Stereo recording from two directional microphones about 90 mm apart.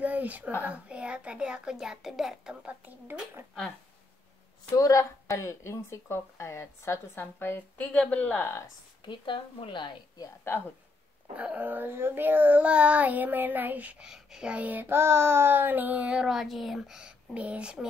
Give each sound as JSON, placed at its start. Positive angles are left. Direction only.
{"t": 0.0, "sound": "a sound", "side_deg": -15}
{"t": 0.7, "sound": "a child's voice", "side_deg": -10}
{"t": 4.7, "sound": "speech", "side_deg": 40}
{"t": 9.0, "sound": "a woman's voice", "side_deg": 65}
{"t": 10.5, "sound": "speech", "side_deg": 25}
{"t": 11.3, "sound": "a child's voice", "side_deg": -15}